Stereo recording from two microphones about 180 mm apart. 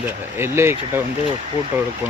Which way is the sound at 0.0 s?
15° right (ahead or behind).